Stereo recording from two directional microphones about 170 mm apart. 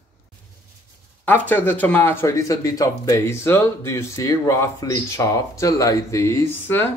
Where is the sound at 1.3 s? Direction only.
10° left (ahead or behind).